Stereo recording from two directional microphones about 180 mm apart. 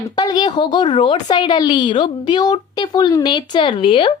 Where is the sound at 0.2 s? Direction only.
25° left (ahead or behind).